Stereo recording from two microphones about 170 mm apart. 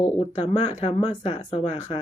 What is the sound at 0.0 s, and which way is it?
Speech, 40° left (ahead or behind).